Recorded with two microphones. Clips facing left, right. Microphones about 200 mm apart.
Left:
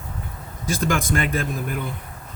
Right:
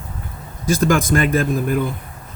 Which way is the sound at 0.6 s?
45° right (ahead or behind).